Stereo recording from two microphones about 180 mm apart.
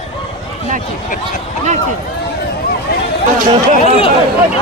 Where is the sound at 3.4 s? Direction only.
40° right (ahead or behind).